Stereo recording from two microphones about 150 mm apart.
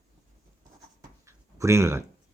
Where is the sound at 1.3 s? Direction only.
20° right (ahead or behind).